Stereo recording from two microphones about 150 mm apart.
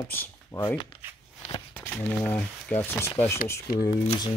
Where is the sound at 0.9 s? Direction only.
40° left (ahead or behind).